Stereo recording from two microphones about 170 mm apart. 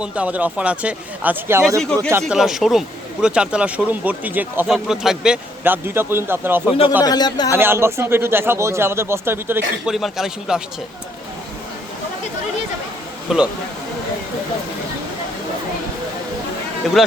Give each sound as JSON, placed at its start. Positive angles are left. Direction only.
{"t": 0.0, "sound": "a man's voice", "side_deg": -10}
{"t": 2.2, "sound": "a man's voice", "side_deg": 0}
{"t": 7.0, "sound": "speech", "side_deg": 25}
{"t": 7.5, "sound": "a man's voice", "side_deg": -15}
{"t": 9.9, "sound": "speech", "side_deg": 0}
{"t": 13.3, "sound": "speech", "side_deg": -5}